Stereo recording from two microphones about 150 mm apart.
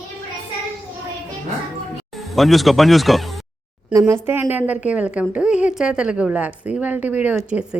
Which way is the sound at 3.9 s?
20° right (ahead or behind).